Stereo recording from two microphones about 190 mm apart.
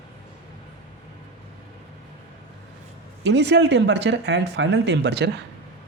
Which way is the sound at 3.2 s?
65° right (ahead or behind).